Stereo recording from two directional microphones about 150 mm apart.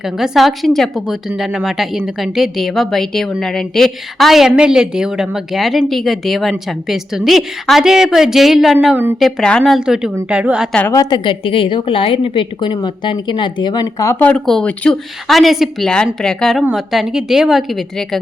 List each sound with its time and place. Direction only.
0.0 s a woman's voice: centre (ahead or behind)
10.8 s a woman's voice: 15° left (ahead or behind)
14.2 s a woman's voice: 5° left (ahead or behind)